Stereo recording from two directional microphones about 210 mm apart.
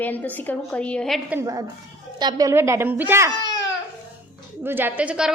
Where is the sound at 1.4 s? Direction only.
15° right (ahead or behind).